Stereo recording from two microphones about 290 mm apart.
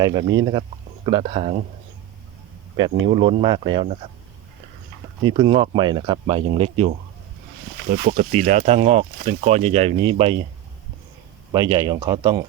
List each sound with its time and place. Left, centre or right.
0.0 s speech: centre
2.7 s speech: centre
5.3 s speech: centre
11.5 s speech: centre